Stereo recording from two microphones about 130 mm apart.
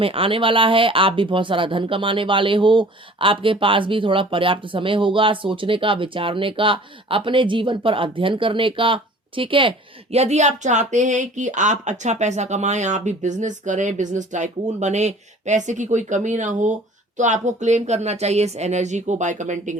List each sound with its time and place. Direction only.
0.0 s speech: 45° right (ahead or behind)
10.2 s speech: 60° right (ahead or behind)